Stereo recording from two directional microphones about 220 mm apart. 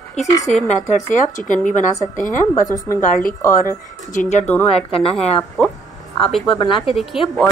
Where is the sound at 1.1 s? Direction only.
35° left (ahead or behind).